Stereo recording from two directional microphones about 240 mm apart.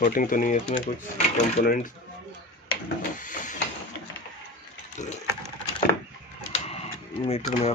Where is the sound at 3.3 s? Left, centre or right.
Left.